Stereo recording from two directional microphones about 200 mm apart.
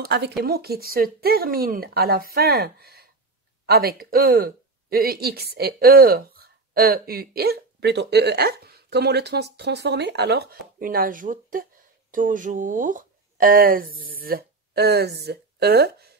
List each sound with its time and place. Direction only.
0.0 s speech: 50° right (ahead or behind)